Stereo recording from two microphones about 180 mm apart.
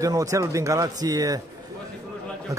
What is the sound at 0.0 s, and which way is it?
A man's voice, 20° right (ahead or behind).